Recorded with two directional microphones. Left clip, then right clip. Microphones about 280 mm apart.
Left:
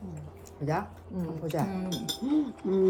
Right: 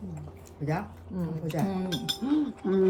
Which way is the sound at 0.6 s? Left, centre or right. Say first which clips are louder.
Left 2 dB; centre.